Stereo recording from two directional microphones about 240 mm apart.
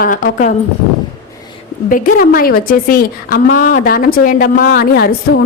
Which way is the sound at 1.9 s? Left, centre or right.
Left.